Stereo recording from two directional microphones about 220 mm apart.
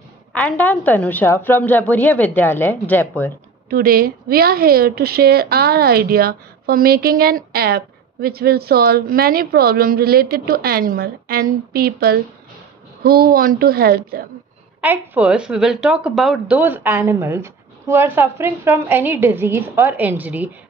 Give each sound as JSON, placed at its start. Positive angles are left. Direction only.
{"t": 0.3, "sound": "a woman's voice", "side_deg": 5}
{"t": 3.7, "sound": "a woman's voice", "side_deg": -40}
{"t": 14.8, "sound": "a woman's voice", "side_deg": -5}